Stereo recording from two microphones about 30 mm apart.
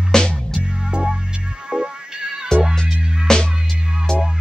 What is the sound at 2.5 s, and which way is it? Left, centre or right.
Music, left.